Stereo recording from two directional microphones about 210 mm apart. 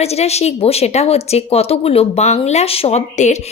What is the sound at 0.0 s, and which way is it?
A woman's voice, 30° left (ahead or behind).